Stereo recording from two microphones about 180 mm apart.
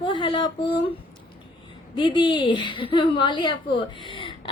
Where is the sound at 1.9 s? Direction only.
25° left (ahead or behind).